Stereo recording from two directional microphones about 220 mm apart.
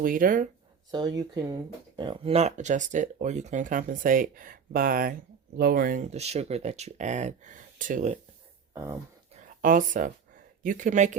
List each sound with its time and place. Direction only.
0.0 s speech: 40° right (ahead or behind)
0.9 s speech: 20° right (ahead or behind); by 8.1 s 35° right (ahead or behind)
9.3 s a sound: 35° right (ahead or behind)
10.6 s speech: 35° right (ahead or behind)